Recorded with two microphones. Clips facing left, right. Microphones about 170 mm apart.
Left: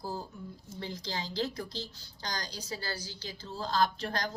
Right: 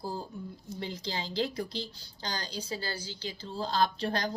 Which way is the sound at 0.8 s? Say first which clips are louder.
Right 1 dB; 20° right (ahead or behind).